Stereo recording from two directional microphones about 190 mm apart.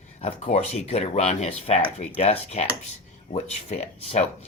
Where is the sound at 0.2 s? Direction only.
35° left (ahead or behind).